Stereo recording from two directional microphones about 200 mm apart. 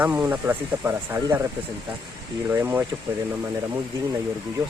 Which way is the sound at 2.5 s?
10° right (ahead or behind).